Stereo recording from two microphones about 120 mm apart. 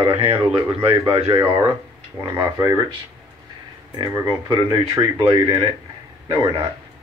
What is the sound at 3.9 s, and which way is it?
Speech, 40° right (ahead or behind).